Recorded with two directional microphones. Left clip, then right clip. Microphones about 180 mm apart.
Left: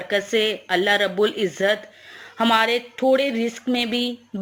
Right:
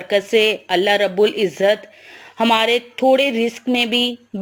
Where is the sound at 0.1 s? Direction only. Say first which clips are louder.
Right 6 dB; 25° right (ahead or behind).